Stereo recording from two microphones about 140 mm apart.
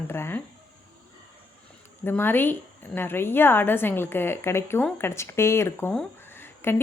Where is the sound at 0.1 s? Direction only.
15° left (ahead or behind).